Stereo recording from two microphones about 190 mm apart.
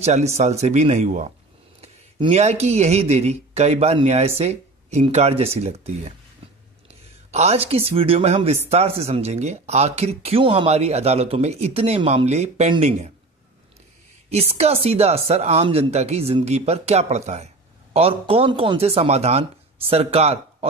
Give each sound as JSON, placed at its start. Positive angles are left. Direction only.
{"t": 0.0, "sound": "speech", "side_deg": -35}
{"t": 7.2, "sound": "speech", "side_deg": -35}
{"t": 14.3, "sound": "speech", "side_deg": -30}